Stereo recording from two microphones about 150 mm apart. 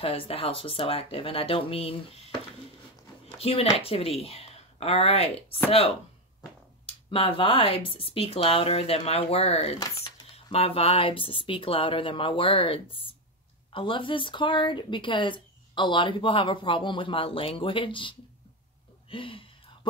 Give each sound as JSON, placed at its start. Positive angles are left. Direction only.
{"t": 0.0, "sound": "speech", "side_deg": 40}
{"t": 7.1, "sound": "speech", "side_deg": 35}
{"t": 19.0, "sound": "a sound", "side_deg": 35}